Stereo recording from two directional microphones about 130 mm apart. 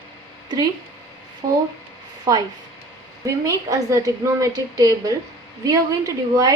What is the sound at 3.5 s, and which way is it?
A woman's voice, 25° right (ahead or behind).